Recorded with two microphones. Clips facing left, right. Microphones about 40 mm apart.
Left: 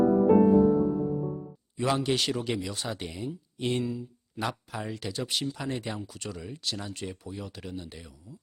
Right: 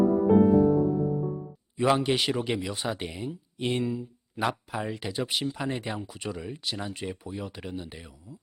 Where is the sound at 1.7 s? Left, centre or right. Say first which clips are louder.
Right 3 dB; centre.